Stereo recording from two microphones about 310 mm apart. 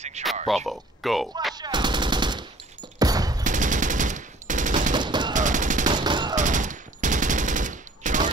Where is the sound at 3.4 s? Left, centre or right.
Right.